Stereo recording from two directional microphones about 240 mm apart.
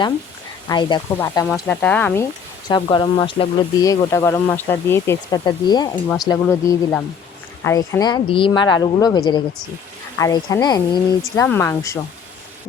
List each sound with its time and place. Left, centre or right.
0.7 s speech: centre
1.5 s speech: centre
2.6 s speech: centre